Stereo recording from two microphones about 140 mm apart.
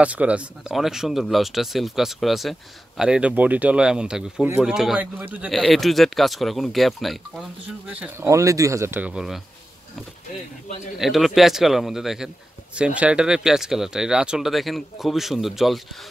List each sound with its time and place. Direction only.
0.0 s speech: 10° right (ahead or behind)
8.3 s speech: 20° right (ahead or behind)
9.1 s speech: 5° right (ahead or behind)
11.0 s speech: centre (ahead or behind)